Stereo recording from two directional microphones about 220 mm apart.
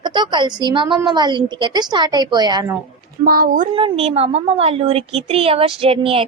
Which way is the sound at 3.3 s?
40° right (ahead or behind).